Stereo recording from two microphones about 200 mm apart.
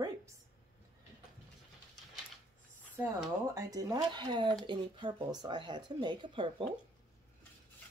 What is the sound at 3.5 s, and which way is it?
Speech, 20° right (ahead or behind).